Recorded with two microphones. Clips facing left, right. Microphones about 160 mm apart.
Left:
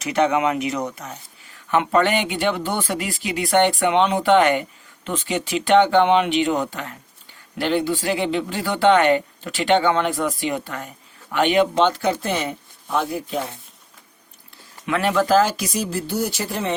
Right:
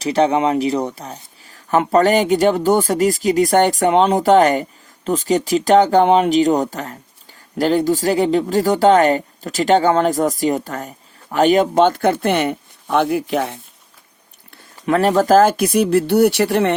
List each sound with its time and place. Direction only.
0.0 s speech: 30° right (ahead or behind); by 13.6 s 80° right
14.8 s speech: 40° right (ahead or behind); by 16.7 s 70° right (ahead or behind)